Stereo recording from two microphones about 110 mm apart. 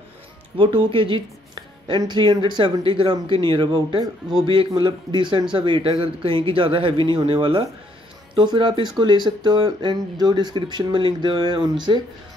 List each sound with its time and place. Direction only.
0.6 s a woman's voice: 50° right (ahead or behind)